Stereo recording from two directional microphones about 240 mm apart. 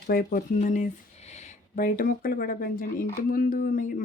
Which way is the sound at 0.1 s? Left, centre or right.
Left.